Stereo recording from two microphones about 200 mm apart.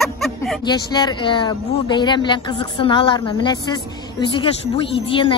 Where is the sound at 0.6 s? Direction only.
20° left (ahead or behind).